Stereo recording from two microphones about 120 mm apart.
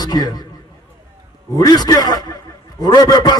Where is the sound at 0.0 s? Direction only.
35° left (ahead or behind).